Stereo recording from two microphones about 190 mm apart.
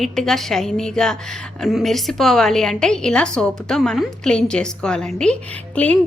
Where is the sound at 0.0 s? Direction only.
Centre (ahead or behind).